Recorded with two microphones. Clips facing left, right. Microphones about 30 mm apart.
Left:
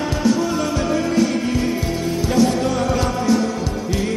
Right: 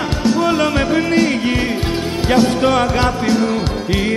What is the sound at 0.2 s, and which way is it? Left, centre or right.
Music, right.